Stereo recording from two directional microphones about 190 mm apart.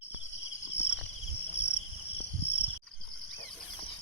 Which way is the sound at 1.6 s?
35° left (ahead or behind).